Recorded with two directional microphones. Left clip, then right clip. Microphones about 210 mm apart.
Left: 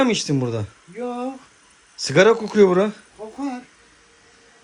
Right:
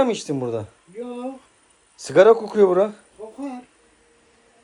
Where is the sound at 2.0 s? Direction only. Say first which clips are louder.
Right 2 dB; centre (ahead or behind).